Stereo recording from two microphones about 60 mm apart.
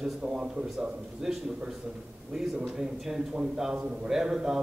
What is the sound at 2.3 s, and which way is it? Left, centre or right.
A man's voice, centre.